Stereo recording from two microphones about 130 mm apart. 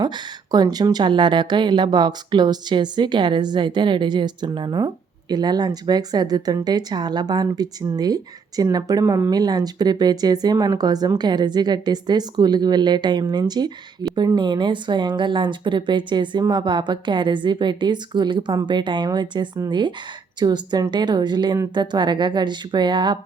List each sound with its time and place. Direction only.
0.0 s a woman's voice: 30° right (ahead or behind)